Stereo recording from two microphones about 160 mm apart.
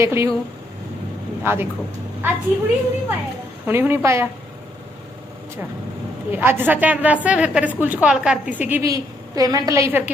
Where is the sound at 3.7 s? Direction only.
15° right (ahead or behind).